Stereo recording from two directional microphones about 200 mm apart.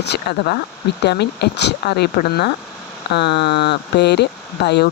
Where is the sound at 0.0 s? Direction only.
55° left (ahead or behind).